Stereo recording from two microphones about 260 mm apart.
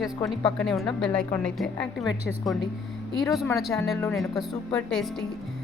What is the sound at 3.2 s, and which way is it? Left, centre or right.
A woman's voice, centre.